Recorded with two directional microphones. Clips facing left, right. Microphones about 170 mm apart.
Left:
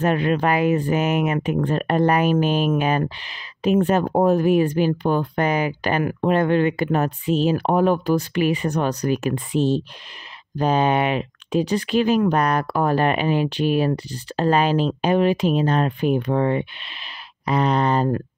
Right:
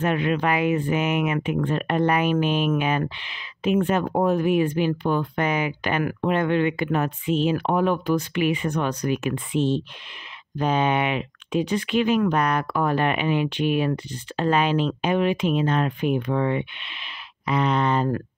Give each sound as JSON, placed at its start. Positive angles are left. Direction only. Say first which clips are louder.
{"t": 0.0, "sound": "speech", "louder": "left 3 dB", "side_deg": 40}